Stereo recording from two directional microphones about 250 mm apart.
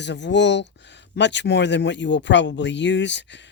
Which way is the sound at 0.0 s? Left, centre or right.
Left.